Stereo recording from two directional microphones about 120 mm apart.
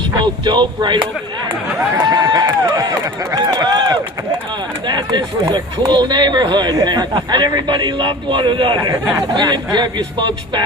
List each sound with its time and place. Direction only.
0.4 s speech: 40° right (ahead or behind)